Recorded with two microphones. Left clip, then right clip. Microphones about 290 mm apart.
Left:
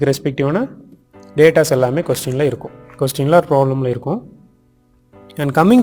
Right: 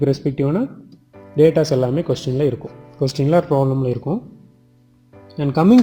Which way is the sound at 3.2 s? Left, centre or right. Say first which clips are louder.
Left 4 dB; left.